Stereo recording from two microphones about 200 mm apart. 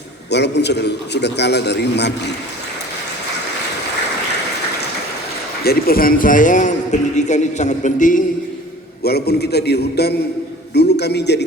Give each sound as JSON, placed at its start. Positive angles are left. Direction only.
{"t": 0.3, "sound": "a man's voice", "side_deg": 60}
{"t": 5.6, "sound": "a man's voice", "side_deg": 45}
{"t": 9.0, "sound": "a man's voice", "side_deg": 55}